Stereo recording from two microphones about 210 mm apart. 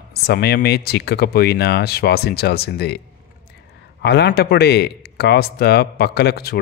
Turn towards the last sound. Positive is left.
turn(degrees=50)  # may be behind; listen again after turning